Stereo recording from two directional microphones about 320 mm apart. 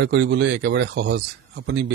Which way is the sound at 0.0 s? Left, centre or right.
Right.